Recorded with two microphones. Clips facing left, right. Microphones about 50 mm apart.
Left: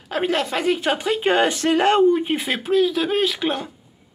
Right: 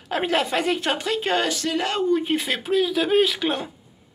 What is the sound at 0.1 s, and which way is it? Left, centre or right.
Speech, centre.